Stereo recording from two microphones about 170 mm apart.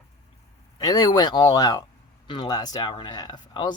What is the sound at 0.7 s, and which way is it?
Speech, 25° left (ahead or behind).